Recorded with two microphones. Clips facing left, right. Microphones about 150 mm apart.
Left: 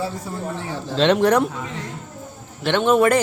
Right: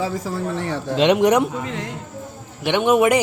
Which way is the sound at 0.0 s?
90° right.